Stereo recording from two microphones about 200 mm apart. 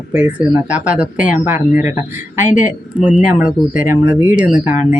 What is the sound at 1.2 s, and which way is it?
Speech, 40° left (ahead or behind).